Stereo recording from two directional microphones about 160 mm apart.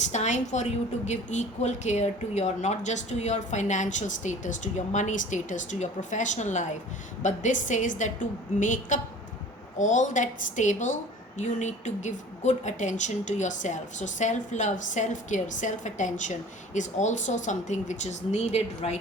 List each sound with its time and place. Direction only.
0.1 s a woman's voice: 45° left (ahead or behind)